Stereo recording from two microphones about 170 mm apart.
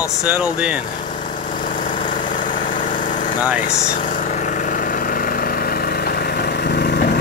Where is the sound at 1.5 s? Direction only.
50° left (ahead or behind).